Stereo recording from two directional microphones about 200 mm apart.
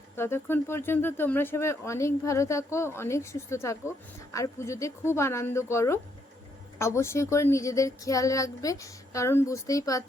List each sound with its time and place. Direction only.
0.2 s speech: 10° left (ahead or behind)